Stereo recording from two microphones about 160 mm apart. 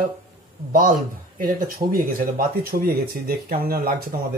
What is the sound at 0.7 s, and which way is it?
Speech, 60° right (ahead or behind).